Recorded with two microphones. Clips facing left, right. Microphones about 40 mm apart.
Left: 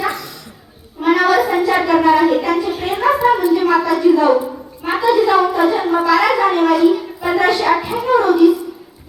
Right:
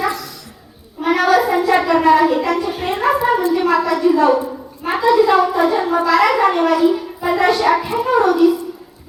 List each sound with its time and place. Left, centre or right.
1.0 s child singing: centre
2.2 s a sound: centre
3.9 s a woman's voice: centre